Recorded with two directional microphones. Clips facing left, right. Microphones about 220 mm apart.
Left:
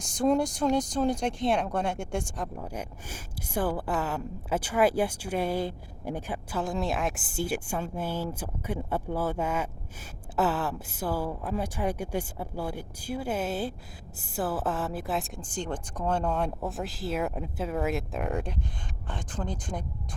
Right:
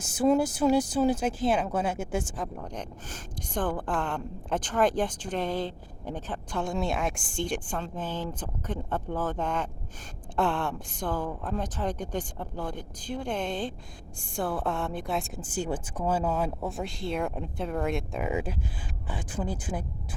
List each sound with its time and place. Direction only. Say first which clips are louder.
0.0 s a woman's voice: right 1 dB; 5° right (ahead or behind)